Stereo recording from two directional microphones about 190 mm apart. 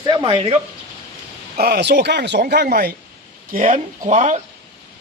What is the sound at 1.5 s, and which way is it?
Speech, 60° right (ahead or behind).